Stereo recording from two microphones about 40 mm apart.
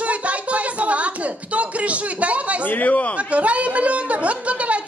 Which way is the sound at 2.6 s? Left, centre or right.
Left.